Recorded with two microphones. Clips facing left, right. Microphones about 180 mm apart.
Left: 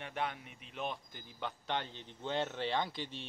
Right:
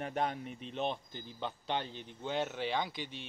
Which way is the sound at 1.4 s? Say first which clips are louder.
Right 1 dB; 15° right (ahead or behind).